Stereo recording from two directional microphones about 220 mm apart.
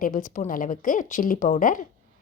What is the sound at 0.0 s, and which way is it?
Speech, 40° left (ahead or behind).